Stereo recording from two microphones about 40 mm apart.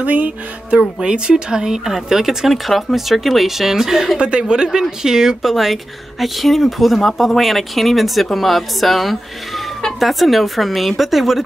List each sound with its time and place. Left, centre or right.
0.0 s speech: right
1.0 s speech: right
4.2 s speech: right; by 11.4 s centre